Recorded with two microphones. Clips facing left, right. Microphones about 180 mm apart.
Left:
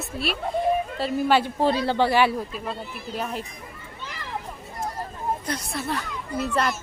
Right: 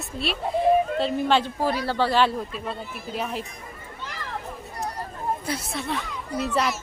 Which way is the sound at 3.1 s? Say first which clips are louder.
Even; centre (ahead or behind).